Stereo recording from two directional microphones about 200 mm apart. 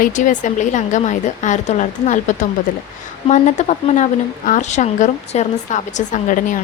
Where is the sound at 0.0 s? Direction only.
40° left (ahead or behind).